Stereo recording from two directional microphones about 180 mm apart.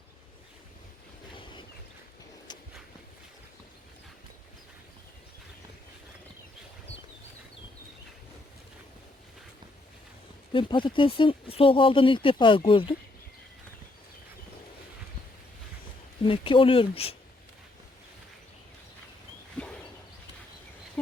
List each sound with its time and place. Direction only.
2.5 s walk: 25° left (ahead or behind)
10.5 s speech: 25° left (ahead or behind)
16.2 s speech: 30° left (ahead or behind)
19.6 s dog: 5° left (ahead or behind)